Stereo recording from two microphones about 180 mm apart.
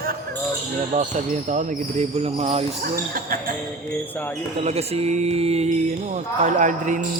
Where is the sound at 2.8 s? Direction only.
55° right (ahead or behind).